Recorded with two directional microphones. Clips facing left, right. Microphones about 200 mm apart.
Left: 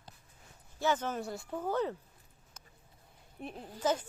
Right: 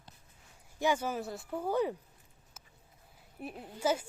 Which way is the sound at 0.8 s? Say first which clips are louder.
Right 1 dB; 10° right (ahead or behind).